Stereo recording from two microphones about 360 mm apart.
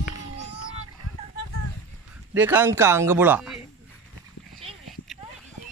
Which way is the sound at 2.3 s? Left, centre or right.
Centre.